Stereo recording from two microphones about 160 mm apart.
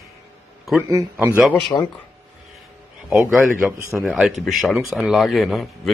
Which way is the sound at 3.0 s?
10° right (ahead or behind).